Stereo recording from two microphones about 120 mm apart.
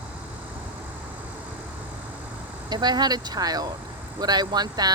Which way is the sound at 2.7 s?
35° right (ahead or behind).